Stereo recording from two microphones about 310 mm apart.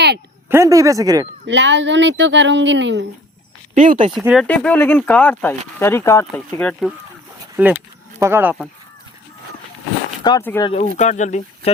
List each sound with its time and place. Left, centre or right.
0.4 s speech: centre
1.5 s speech: right
3.8 s speech: right
4.1 s speech: centre
10.2 s speech: centre
10.7 s speech: left